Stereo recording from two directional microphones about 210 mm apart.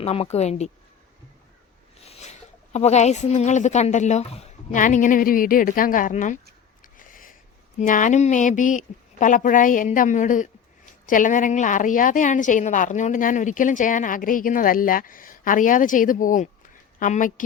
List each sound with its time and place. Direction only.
0.0 s a woman's voice: 30° left (ahead or behind)
2.0 s a woman's voice: 30° left (ahead or behind)
6.9 s a sound: 40° left (ahead or behind)
7.8 s a woman's voice: 35° left (ahead or behind)